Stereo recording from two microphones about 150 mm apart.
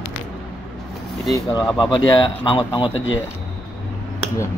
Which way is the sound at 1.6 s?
Centre (ahead or behind).